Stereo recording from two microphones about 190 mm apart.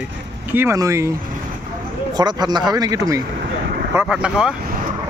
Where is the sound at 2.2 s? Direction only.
20° right (ahead or behind).